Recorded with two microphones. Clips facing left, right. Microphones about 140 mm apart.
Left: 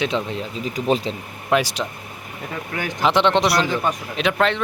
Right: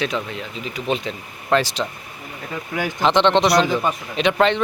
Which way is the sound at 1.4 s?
10° left (ahead or behind).